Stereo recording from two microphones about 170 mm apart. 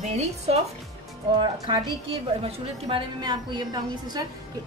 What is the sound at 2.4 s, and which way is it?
A woman's voice, 30° right (ahead or behind).